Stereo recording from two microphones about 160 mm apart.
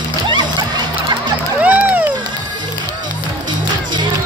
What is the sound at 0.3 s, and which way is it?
Music, 30° right (ahead or behind).